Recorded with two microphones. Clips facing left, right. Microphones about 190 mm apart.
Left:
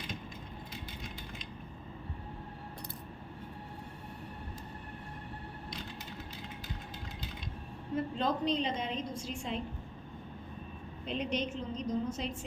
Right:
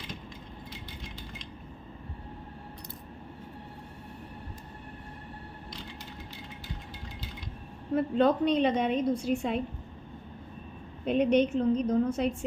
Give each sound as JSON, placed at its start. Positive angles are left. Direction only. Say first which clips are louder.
{"t": 7.9, "sound": "a woman's voice", "louder": "right 8 dB", "side_deg": -65}
{"t": 11.0, "sound": "a woman's voice", "louder": "right 11 dB", "side_deg": -55}